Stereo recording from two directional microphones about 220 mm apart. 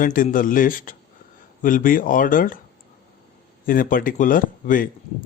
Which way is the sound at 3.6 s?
40° left (ahead or behind).